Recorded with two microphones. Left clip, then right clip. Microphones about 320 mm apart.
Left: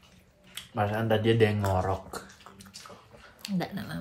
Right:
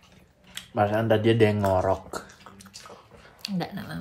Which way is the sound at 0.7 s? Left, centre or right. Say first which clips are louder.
Right 5 dB; right.